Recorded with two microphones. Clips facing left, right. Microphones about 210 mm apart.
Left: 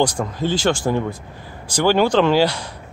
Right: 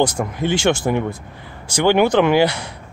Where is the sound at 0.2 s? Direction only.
10° right (ahead or behind).